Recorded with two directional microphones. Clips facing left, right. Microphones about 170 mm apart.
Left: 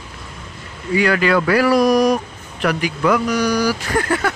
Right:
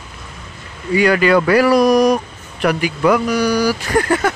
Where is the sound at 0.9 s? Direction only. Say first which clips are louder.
Right 3 dB; 15° right (ahead or behind).